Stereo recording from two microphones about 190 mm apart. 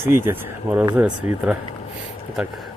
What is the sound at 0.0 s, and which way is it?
Speech, 10° right (ahead or behind).